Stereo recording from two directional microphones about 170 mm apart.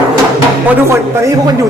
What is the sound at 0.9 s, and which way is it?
Speech, 20° right (ahead or behind).